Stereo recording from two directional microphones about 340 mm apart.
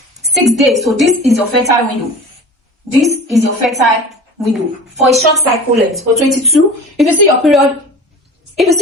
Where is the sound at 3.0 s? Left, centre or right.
Centre.